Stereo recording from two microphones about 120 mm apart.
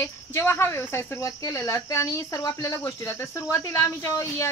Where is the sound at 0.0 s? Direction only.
20° left (ahead or behind).